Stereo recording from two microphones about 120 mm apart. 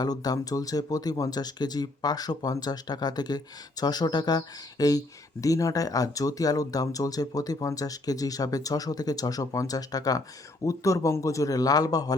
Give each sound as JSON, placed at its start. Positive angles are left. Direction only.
{"t": 0.0, "sound": "a man's voice", "side_deg": 30}